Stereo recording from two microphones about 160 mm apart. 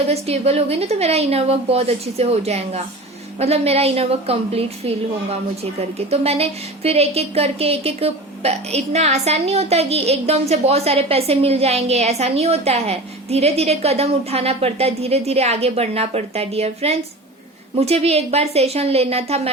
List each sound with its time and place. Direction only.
0.1 s a woman's voice: 40° right (ahead or behind)